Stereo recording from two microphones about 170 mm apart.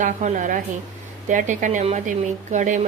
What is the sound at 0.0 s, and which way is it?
Speech, 45° right (ahead or behind).